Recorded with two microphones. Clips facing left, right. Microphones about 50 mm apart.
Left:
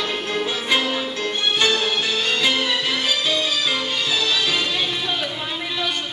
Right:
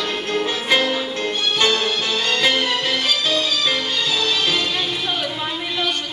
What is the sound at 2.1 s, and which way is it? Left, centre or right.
Music, right.